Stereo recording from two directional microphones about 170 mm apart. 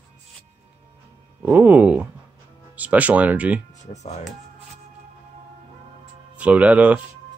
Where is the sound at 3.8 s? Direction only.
40° left (ahead or behind).